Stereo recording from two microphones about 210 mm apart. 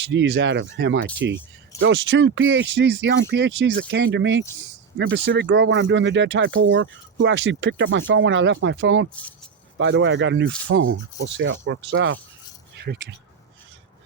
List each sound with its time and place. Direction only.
0.0 s speech: 60° right (ahead or behind)